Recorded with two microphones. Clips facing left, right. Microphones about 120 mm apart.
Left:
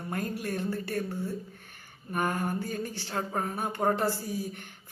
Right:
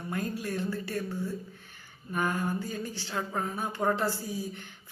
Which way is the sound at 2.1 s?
50° left (ahead or behind).